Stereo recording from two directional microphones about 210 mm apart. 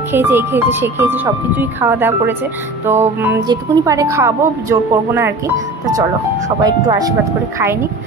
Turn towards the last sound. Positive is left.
turn(degrees=-10)  # may be behind; listen again after turning